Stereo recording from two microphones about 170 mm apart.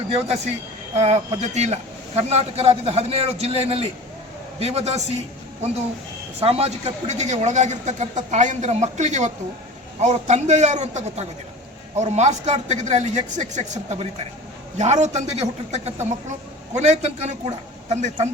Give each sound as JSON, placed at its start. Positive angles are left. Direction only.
{"t": 0.1, "sound": "a man's voice", "side_deg": -40}
{"t": 6.4, "sound": "a man's voice", "side_deg": -35}